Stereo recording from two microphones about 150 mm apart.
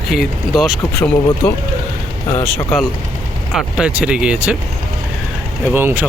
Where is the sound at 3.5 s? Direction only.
5° right (ahead or behind).